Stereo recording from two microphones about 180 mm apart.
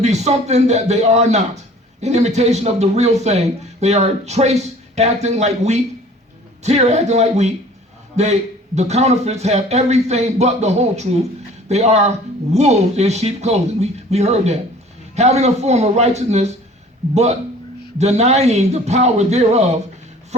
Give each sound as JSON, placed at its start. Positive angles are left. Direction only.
{"t": 0.0, "sound": "speech", "side_deg": -40}
{"t": 17.9, "sound": "speech", "side_deg": -40}